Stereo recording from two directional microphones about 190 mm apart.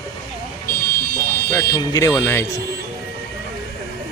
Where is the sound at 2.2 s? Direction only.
15° left (ahead or behind).